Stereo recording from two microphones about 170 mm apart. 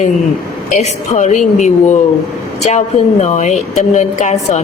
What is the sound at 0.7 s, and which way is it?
Speech, 45° left (ahead or behind).